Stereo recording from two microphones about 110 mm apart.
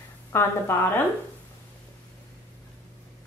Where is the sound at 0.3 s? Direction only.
20° left (ahead or behind).